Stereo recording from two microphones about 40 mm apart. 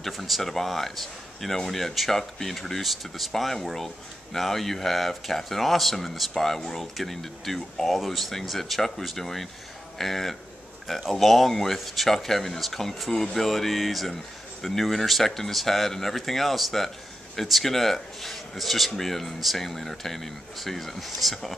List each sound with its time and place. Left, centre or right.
0.0 s speech: centre